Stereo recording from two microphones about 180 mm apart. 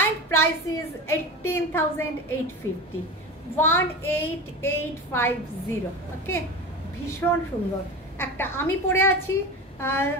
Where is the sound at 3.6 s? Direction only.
10° left (ahead or behind).